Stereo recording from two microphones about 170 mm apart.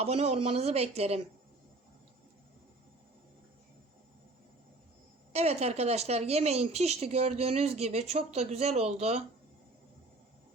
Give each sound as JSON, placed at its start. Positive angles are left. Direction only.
{"t": 0.0, "sound": "speech", "side_deg": -40}
{"t": 5.3, "sound": "speech", "side_deg": -40}